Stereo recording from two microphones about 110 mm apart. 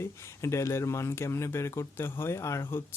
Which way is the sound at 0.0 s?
25° left (ahead or behind).